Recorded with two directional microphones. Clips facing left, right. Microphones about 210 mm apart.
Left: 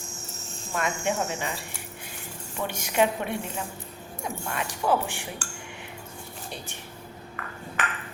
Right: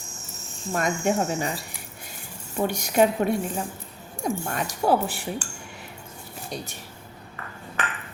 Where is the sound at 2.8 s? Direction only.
40° right (ahead or behind).